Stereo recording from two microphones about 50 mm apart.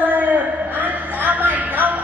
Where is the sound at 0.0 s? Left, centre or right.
Right.